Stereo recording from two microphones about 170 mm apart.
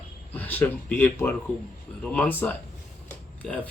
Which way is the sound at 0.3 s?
10° left (ahead or behind).